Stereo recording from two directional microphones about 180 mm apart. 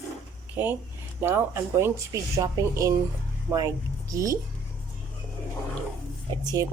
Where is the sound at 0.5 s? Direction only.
10° right (ahead or behind).